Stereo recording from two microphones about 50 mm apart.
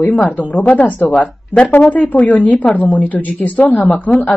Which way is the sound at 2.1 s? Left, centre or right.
Left.